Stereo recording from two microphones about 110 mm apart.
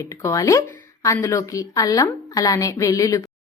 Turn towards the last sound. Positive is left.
turn(degrees=30)  # may be behind; listen again after turning